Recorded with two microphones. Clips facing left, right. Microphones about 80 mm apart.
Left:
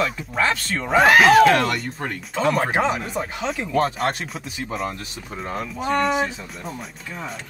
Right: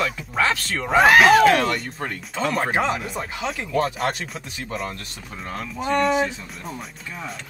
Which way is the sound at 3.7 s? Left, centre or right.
Left.